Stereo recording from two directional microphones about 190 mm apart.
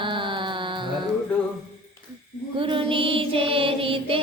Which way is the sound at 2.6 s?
25° right (ahead or behind).